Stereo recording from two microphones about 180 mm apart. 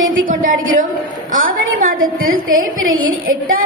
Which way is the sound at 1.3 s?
50° right (ahead or behind).